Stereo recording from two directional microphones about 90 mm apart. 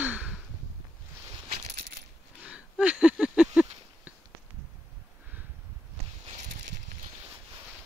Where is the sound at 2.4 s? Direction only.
10° right (ahead or behind).